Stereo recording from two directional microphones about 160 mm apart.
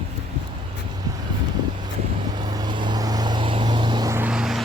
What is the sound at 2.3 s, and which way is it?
Vehicle, 25° right (ahead or behind).